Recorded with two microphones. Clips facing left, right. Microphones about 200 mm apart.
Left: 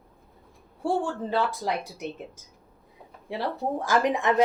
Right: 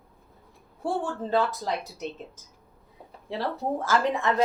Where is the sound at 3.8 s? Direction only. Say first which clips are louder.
Left 2 dB; 15° left (ahead or behind).